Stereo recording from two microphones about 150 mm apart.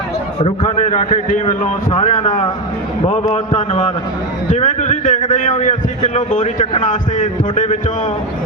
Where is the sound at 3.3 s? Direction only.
45° left (ahead or behind).